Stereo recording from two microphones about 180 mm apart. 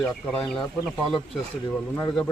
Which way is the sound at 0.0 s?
5° left (ahead or behind).